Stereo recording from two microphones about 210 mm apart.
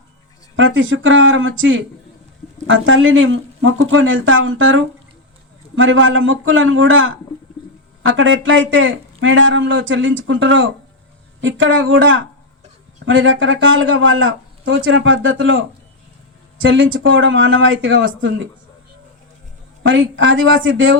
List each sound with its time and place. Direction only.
0.5 s speech: 65° right (ahead or behind)
19.9 s speech: 65° right (ahead or behind)